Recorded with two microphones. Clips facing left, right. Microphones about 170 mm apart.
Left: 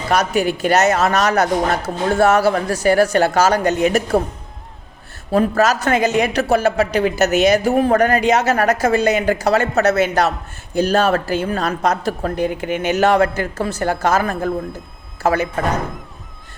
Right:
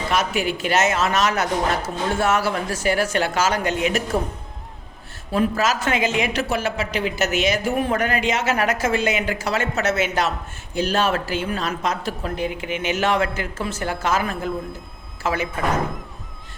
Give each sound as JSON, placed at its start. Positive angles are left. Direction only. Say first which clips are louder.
{"t": 0.1, "sound": "speech", "louder": "left 6 dB", "side_deg": 40}
{"t": 5.3, "sound": "speech", "louder": "left 5 dB", "side_deg": 40}